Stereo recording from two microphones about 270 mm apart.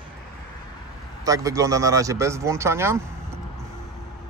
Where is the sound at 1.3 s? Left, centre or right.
Centre.